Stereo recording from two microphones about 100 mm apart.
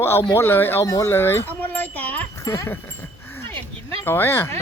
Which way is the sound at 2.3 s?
30° left (ahead or behind).